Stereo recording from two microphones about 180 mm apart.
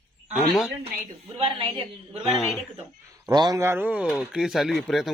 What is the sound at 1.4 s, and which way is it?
Speech, 30° right (ahead or behind).